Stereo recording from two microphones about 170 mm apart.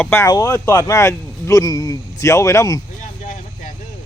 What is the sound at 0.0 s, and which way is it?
Speech, 15° left (ahead or behind).